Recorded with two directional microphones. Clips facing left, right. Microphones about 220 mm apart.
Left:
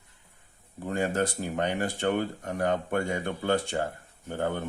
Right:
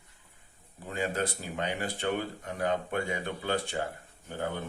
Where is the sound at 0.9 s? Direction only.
50° left (ahead or behind).